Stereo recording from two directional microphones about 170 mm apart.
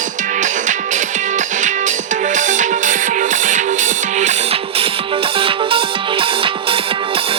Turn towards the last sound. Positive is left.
turn(degrees=-30)  # may be behind; listen again after turning